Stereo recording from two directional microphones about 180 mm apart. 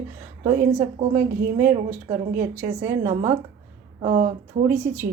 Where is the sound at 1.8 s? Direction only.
45° right (ahead or behind).